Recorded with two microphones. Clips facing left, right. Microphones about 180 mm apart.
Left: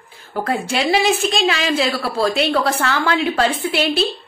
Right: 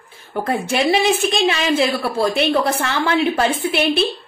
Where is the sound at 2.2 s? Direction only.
20° right (ahead or behind).